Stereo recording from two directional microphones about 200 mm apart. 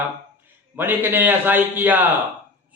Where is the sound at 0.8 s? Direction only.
10° right (ahead or behind).